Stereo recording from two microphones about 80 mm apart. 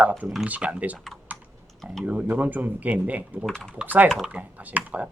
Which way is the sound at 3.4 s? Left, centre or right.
Centre.